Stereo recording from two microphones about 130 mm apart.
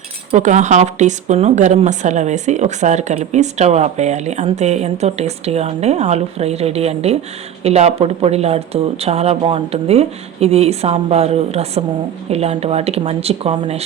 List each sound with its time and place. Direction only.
0.3 s speech: 65° right (ahead or behind); by 13.8 s 50° right (ahead or behind)